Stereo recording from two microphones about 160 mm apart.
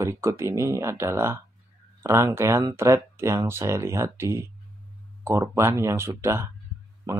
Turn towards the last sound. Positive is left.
turn(degrees=-25)  # may be behind; listen again after turning